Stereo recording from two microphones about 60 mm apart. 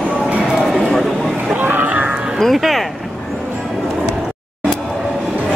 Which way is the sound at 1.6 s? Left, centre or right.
Right.